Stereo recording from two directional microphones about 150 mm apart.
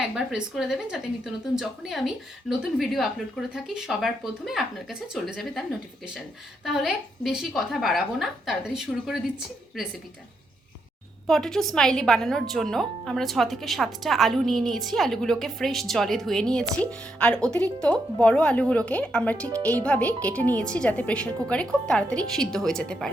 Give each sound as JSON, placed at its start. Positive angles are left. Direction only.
{"t": 0.0, "sound": "a woman's voice", "side_deg": -5}
{"t": 6.7, "sound": "a woman's voice", "side_deg": -5}
{"t": 11.3, "sound": "a woman's voice", "side_deg": 5}